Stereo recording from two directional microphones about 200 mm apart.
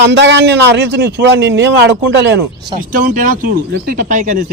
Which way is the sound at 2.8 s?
40° right (ahead or behind).